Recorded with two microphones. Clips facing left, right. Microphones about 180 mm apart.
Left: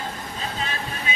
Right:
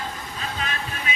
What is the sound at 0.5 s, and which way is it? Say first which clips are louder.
Vehicle: right 1 dB; 30° left (ahead or behind).